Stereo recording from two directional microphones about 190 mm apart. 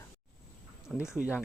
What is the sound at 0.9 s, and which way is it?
Speech, centre (ahead or behind).